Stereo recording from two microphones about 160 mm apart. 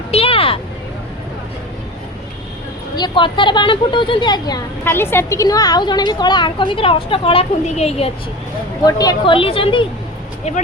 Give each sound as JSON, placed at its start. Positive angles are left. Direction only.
{"t": 0.1, "sound": "vehicle", "side_deg": 35}
{"t": 2.9, "sound": "a woman's voice", "side_deg": 30}
{"t": 4.9, "sound": "a woman's voice", "side_deg": 15}
{"t": 8.9, "sound": "a woman's voice", "side_deg": 25}